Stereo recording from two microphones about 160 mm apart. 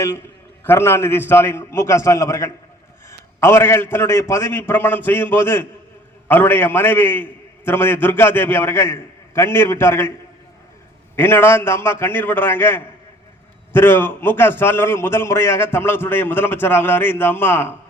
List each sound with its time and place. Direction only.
0.6 s a man's voice: 15° left (ahead or behind)
11.2 s a man's voice: 15° left (ahead or behind)